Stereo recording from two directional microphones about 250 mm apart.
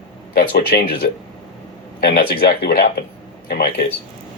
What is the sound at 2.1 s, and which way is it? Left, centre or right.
Speech, left.